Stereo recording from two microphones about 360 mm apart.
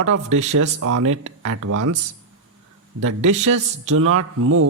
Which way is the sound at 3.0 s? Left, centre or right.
Right.